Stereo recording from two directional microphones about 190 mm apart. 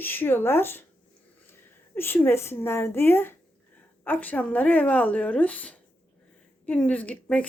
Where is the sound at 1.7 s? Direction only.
10° left (ahead or behind).